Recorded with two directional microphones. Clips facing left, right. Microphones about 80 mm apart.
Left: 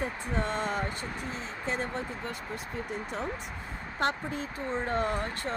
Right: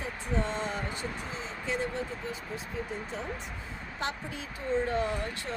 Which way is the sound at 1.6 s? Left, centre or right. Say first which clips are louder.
Even; left.